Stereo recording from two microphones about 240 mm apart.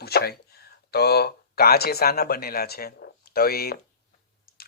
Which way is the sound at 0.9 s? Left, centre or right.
Left.